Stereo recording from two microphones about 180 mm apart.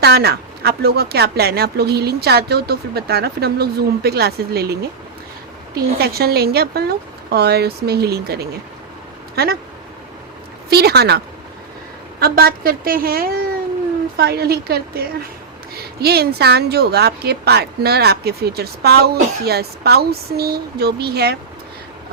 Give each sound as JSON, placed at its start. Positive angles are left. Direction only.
{"t": 0.0, "sound": "a woman's voice", "side_deg": -65}
{"t": 10.7, "sound": "a woman's voice", "side_deg": -60}
{"t": 12.2, "sound": "a woman's voice", "side_deg": -55}